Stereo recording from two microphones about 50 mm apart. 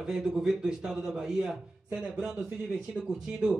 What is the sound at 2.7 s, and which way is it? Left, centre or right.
Speech, centre.